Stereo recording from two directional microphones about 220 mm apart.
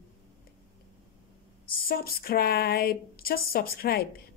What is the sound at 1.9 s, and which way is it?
A woman's voice, 40° left (ahead or behind).